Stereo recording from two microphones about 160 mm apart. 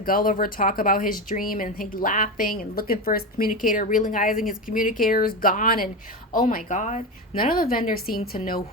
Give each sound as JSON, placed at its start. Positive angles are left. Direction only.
{"t": 0.0, "sound": "speech", "side_deg": 60}